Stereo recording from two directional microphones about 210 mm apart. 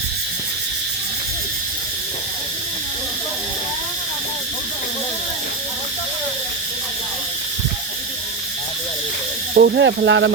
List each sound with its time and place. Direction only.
9.6 s speech: 50° right (ahead or behind)